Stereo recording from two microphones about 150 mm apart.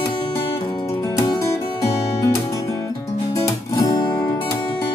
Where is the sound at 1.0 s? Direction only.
20° left (ahead or behind).